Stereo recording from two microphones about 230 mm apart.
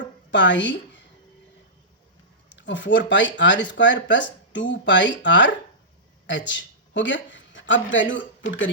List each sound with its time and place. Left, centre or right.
0.3 s a woman's voice: left
2.6 s speech: left